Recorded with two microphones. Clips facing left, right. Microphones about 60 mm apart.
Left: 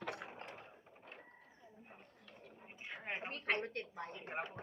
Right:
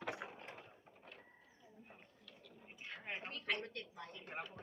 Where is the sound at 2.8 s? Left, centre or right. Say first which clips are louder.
Left 3 dB; left.